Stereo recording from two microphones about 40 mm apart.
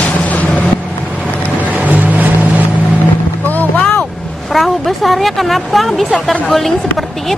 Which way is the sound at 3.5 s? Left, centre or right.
Left.